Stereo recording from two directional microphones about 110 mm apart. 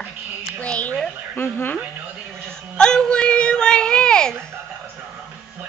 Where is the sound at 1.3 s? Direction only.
20° left (ahead or behind).